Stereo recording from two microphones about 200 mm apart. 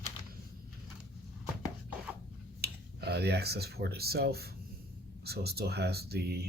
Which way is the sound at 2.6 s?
55° right (ahead or behind).